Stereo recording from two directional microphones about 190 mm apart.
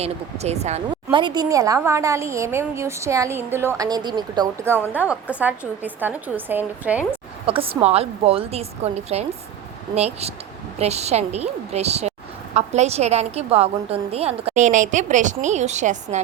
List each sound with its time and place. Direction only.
0.0 s a woman's voice: 35° right (ahead or behind)
1.1 s a woman's voice: 25° right (ahead or behind)
7.4 s a woman's voice: 30° right (ahead or behind)